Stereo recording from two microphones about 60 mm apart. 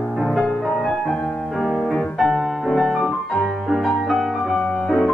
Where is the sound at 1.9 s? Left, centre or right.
Centre.